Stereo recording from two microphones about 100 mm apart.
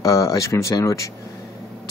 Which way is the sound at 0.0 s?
35° left (ahead or behind).